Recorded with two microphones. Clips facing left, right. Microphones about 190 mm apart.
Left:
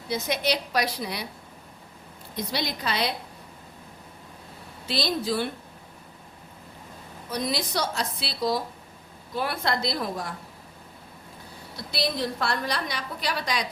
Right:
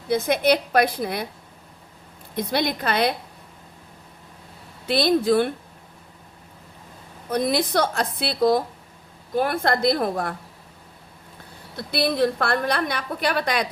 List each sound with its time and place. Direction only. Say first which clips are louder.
0.1 s a woman's voice: right 7 dB; 55° right (ahead or behind)
2.3 s a woman's voice: right 7 dB; 55° right (ahead or behind)
4.9 s a woman's voice: right 8 dB; 55° right (ahead or behind)
7.3 s a woman's voice: right 7 dB; 55° right (ahead or behind)
11.8 s a woman's voice: right 7 dB; 55° right (ahead or behind)